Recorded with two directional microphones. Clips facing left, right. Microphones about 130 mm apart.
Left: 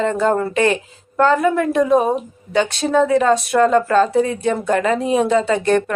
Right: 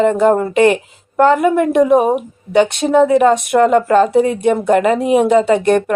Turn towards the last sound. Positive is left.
turn(degrees=-20)  # may be behind; listen again after turning